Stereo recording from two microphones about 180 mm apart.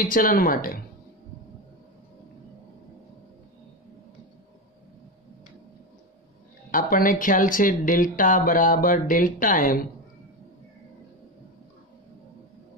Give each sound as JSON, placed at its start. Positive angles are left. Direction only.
{"t": 0.0, "sound": "speech", "side_deg": 50}
{"t": 6.7, "sound": "speech", "side_deg": 50}